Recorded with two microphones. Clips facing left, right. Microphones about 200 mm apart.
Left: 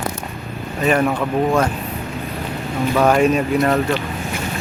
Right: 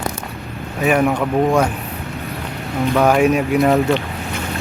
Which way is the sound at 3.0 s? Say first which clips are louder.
Even; 10° right (ahead or behind).